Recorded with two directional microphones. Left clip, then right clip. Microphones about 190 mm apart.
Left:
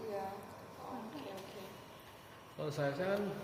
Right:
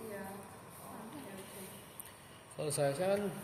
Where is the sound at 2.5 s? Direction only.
45° right (ahead or behind).